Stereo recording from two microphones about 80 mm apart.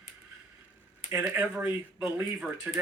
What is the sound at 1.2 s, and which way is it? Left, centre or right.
Speech, centre.